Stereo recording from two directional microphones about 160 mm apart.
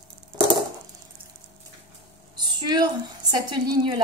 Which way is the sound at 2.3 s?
25° right (ahead or behind).